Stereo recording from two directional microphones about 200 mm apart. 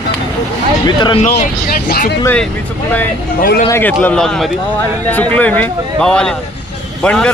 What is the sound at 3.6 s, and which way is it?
A man's voice, 10° left (ahead or behind).